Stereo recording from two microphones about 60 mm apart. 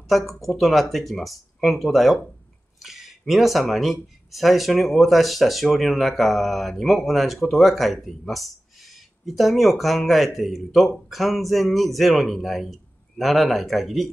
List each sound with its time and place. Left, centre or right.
0.4 s speech: centre